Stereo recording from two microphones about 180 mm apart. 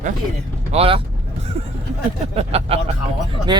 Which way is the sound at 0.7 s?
35° right (ahead or behind).